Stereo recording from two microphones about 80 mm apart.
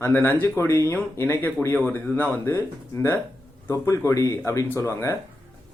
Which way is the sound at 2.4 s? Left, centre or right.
Left.